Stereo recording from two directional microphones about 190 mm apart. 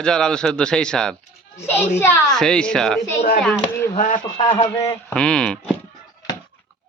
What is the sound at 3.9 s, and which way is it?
Speech, 40° left (ahead or behind).